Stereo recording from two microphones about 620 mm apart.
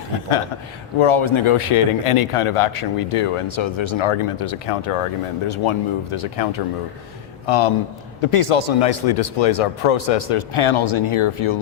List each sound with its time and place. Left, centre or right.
0.9 s a man's voice: left